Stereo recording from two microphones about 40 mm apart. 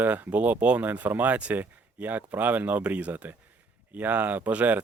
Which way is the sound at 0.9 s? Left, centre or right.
Right.